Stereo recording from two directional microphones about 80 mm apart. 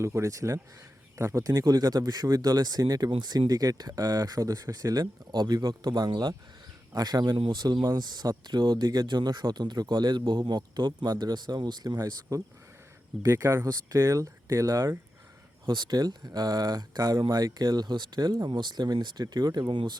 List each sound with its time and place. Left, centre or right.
0.0 s speech: right
1.5 s speech: right
5.3 s speech: right
15.6 s speech: right
19.7 s speech: right